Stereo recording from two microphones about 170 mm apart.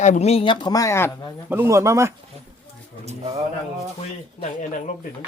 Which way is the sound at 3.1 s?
40° right (ahead or behind).